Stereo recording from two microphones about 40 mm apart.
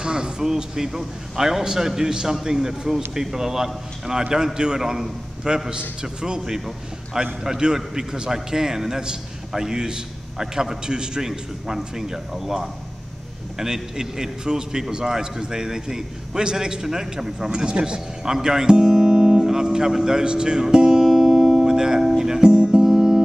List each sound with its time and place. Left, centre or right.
0.0 s a sound: right
0.5 s a man's voice: centre
22.6 s music: centre